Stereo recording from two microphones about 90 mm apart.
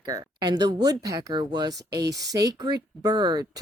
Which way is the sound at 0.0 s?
45° right (ahead or behind).